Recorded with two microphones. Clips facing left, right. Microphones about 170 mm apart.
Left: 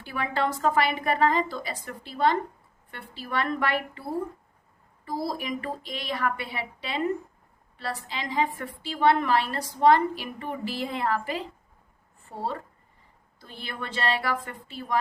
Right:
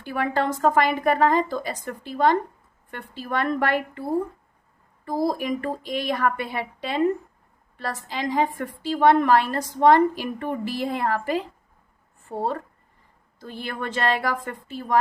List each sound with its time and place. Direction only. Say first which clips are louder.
0.0 s a woman's voice: right 4 dB; 45° right (ahead or behind)
5.0 s a woman's voice: right 6 dB; 50° right (ahead or behind)
12.3 s speech: right 7 dB; 60° right (ahead or behind)
13.4 s a woman's voice: right 6 dB; 45° right (ahead or behind)